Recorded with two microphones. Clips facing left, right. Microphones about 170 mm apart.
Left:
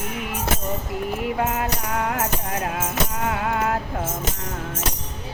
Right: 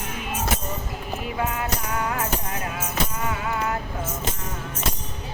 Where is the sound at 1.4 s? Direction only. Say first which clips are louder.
Left 3 dB; 70° left (ahead or behind).